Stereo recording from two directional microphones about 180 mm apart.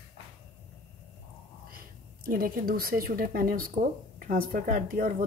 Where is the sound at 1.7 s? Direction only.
55° right (ahead or behind).